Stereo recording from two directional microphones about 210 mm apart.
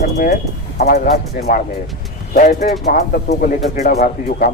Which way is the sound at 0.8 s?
45° left (ahead or behind).